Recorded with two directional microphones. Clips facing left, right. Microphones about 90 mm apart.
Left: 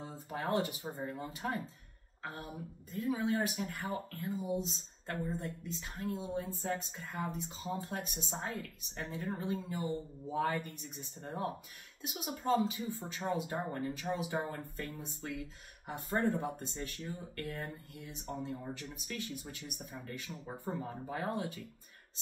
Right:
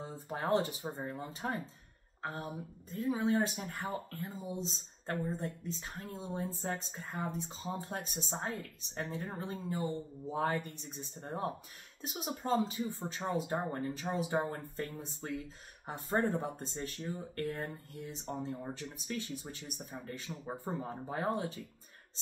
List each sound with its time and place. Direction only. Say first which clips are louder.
0.3 s a woman's voice: right 2 dB; 30° right (ahead or behind)